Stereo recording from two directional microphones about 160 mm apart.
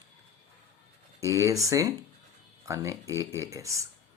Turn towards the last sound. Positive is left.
turn(degrees=-20)  # may be behind; listen again after turning